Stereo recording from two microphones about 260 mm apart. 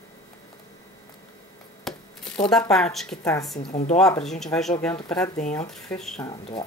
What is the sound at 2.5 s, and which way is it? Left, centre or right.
Speech, centre.